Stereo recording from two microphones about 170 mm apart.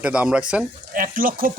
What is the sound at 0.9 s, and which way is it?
Speech, 55° right (ahead or behind).